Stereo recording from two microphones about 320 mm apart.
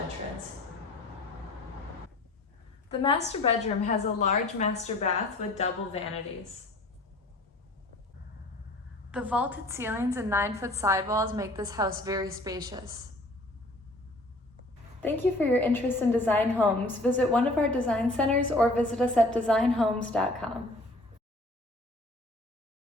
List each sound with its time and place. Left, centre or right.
3.6 s a woman's voice: left
9.1 s a woman's voice: centre
15.0 s a woman's voice: centre